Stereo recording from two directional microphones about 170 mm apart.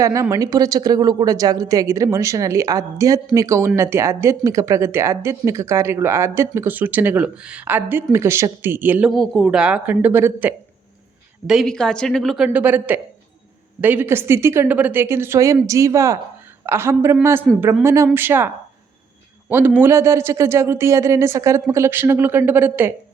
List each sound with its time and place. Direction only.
0.0 s a woman's voice: 20° right (ahead or behind)
11.4 s a woman's voice: centre (ahead or behind)